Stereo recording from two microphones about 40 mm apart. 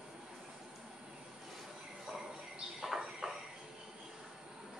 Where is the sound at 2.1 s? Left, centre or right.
Centre.